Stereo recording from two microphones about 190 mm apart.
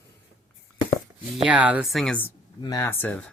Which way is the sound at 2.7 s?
15° left (ahead or behind).